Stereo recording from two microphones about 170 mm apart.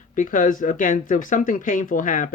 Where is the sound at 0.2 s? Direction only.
50° left (ahead or behind).